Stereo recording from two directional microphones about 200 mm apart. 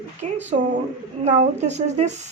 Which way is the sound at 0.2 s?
35° right (ahead or behind).